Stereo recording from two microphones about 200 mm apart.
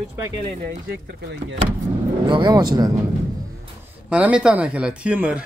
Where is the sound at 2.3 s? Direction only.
25° right (ahead or behind).